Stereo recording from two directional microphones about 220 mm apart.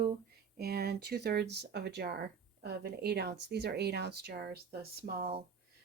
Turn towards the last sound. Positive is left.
turn(degrees=-45)  # may be behind; listen again after turning